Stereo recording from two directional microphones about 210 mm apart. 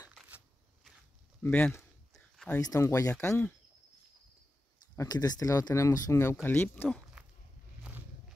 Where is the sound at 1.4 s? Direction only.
5° left (ahead or behind).